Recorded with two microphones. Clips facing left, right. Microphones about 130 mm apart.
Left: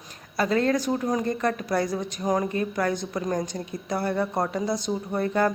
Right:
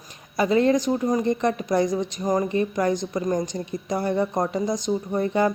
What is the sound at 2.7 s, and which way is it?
A woman's voice, 15° right (ahead or behind).